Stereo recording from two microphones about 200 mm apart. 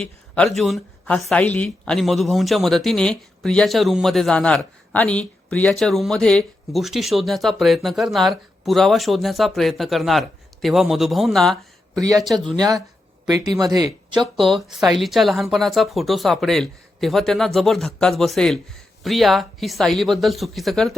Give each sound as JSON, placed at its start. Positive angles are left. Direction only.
{"t": 0.0, "sound": "speech", "side_deg": 5}
{"t": 13.2, "sound": "speech", "side_deg": -20}
{"t": 14.2, "sound": "speech", "side_deg": 0}